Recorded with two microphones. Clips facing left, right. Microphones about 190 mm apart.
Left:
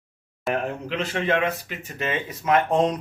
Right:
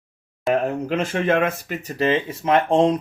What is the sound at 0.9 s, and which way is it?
Speech, 50° right (ahead or behind).